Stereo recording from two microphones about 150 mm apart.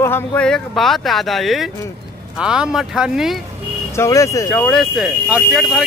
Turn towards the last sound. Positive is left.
turn(degrees=0)  # may be behind; listen again after turning